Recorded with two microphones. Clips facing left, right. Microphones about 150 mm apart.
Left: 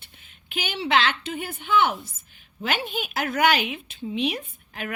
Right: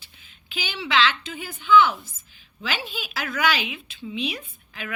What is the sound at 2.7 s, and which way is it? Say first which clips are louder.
Speech: left 4 dB; 55° left (ahead or behind).